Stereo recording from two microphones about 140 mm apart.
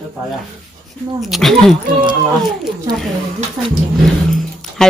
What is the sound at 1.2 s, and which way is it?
Speech, centre (ahead or behind).